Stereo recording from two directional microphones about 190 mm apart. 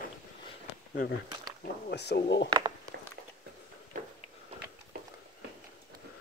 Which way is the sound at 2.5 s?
25° right (ahead or behind).